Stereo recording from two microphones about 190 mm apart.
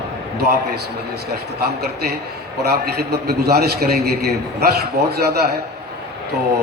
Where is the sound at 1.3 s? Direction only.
55° right (ahead or behind).